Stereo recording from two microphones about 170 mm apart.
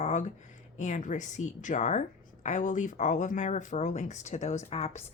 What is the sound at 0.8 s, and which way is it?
A woman's voice, 45° left (ahead or behind).